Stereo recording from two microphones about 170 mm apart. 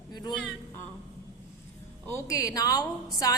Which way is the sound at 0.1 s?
25° left (ahead or behind).